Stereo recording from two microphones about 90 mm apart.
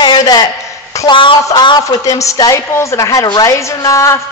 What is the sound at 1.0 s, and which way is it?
Speech, 70° left (ahead or behind).